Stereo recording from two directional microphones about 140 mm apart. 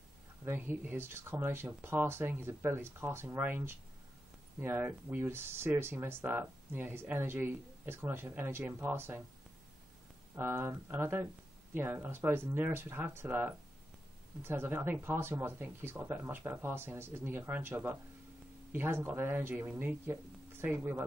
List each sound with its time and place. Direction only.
0.5 s speech: 15° right (ahead or behind)
10.3 s speech: 15° right (ahead or behind)